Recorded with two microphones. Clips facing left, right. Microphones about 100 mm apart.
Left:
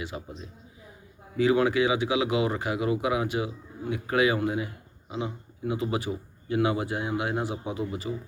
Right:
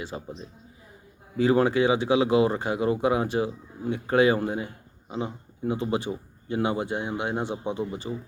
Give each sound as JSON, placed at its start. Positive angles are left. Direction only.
{"t": 0.1, "sound": "speech", "side_deg": -30}
{"t": 1.4, "sound": "speech", "side_deg": -35}